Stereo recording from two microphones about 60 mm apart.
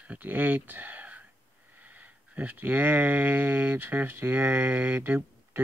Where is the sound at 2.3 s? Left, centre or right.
Right.